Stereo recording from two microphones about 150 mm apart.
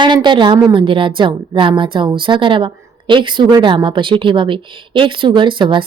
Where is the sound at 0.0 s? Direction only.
30° right (ahead or behind).